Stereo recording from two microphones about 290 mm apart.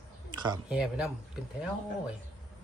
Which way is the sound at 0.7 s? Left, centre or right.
Centre.